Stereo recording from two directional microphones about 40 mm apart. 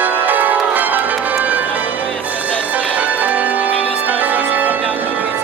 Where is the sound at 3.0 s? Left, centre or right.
Right.